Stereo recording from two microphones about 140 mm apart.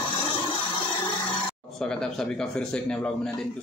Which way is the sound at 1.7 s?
5° left (ahead or behind).